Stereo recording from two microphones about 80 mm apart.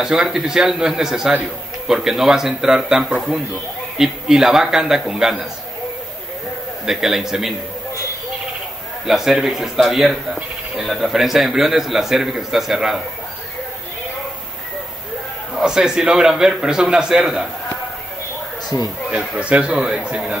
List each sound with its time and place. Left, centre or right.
0.0 s a man's voice: centre
6.9 s speech: centre
9.0 s speech: centre
15.5 s a man's voice: centre
18.7 s speech: left
19.0 s a man's voice: centre